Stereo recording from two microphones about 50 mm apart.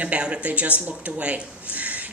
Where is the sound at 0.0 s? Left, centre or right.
Right.